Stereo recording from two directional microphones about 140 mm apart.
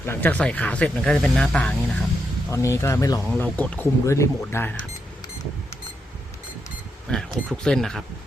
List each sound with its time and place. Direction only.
0.0 s speech: 15° left (ahead or behind)
2.5 s speech: 20° left (ahead or behind)
3.2 s speech: 10° left (ahead or behind)
7.1 s speech: 5° left (ahead or behind)